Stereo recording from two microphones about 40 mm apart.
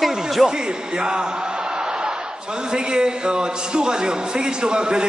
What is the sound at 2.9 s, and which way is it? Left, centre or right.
A man's voice, right.